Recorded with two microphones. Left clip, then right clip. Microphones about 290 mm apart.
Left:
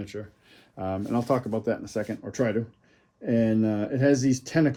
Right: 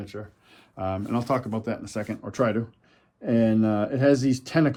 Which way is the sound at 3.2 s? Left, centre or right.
Centre.